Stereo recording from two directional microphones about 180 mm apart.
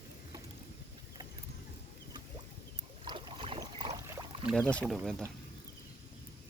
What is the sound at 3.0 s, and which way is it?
Boat, 25° right (ahead or behind).